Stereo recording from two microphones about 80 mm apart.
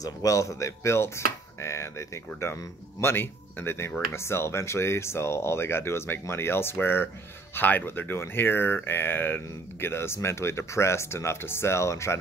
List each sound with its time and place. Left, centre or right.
0.0 s speech: left